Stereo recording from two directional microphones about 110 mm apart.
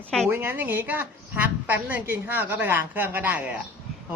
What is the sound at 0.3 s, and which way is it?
A woman's voice, 20° right (ahead or behind).